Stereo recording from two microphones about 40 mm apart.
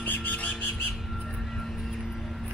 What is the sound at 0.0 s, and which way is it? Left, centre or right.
Squawk, left.